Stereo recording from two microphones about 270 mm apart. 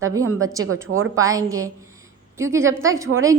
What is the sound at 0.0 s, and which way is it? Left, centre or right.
A woman's voice, centre.